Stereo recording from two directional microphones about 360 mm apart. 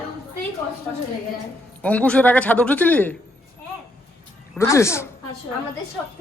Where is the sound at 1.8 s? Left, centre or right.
Centre.